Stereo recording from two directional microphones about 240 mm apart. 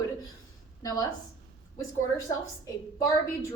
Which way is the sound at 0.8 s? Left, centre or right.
Centre.